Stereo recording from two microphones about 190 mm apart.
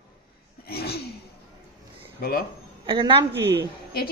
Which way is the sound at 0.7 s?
55° left (ahead or behind).